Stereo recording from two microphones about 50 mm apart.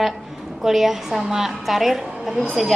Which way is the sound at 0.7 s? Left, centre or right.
Centre.